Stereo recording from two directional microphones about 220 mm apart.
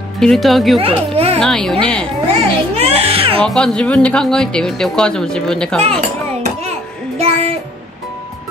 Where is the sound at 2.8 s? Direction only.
25° right (ahead or behind).